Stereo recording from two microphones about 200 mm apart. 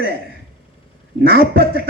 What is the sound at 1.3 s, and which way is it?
Speech, 50° left (ahead or behind).